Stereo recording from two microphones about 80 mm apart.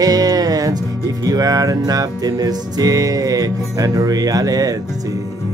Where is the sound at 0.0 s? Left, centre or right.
Right.